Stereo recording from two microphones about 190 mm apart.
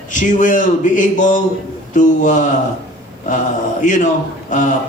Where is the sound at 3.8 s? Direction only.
40° left (ahead or behind).